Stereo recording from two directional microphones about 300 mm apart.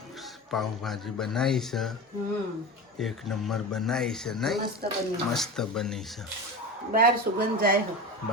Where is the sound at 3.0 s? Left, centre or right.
Centre.